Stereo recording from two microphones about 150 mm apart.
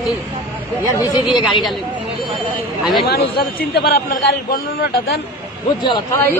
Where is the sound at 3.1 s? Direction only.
90° left.